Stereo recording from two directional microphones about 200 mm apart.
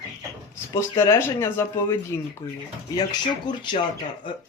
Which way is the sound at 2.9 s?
20° left (ahead or behind).